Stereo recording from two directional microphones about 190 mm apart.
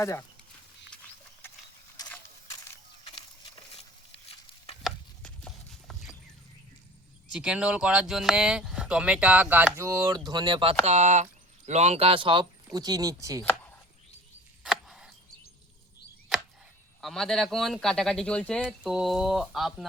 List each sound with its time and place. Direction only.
0.0 s speech: 15° left (ahead or behind)
3.0 s a sound: 25° left (ahead or behind)
4.8 s clip-clop: centre (ahead or behind)
7.3 s speech: 5° right (ahead or behind)
14.6 s a sound: centre (ahead or behind)
17.0 s a man's voice: centre (ahead or behind)